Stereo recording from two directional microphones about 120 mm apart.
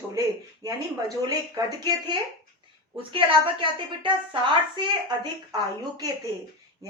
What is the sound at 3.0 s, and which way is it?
A woman's voice, 45° right (ahead or behind).